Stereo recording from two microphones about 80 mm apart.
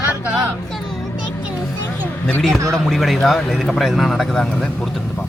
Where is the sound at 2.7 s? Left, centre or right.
Centre.